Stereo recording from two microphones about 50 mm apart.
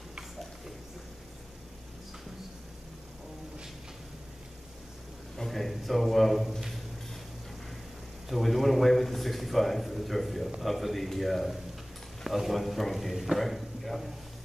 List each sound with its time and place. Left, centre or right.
5.4 s a man's voice: centre
8.3 s a man's voice: centre